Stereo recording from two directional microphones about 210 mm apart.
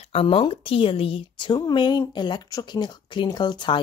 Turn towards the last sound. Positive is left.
turn(degrees=20)  # may be behind; listen again after turning